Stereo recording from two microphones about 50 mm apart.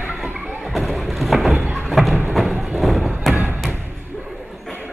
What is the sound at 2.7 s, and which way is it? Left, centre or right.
Thump, centre.